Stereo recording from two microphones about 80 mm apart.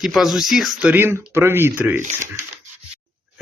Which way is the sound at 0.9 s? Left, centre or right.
Right.